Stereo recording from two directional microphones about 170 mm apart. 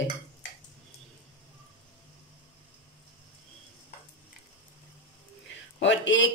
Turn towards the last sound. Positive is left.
turn(degrees=90)